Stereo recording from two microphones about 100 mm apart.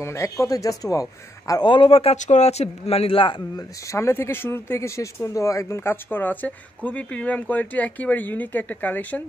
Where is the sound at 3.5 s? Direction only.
30° left (ahead or behind).